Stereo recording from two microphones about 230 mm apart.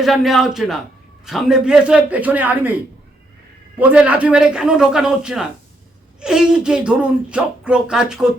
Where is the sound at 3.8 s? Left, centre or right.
Centre.